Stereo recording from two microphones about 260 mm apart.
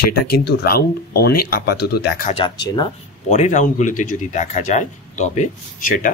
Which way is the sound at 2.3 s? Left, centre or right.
Centre.